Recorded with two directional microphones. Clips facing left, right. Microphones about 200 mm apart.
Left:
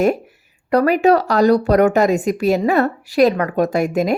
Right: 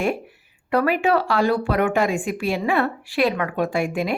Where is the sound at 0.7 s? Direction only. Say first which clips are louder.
Left 6 dB; 40° left (ahead or behind).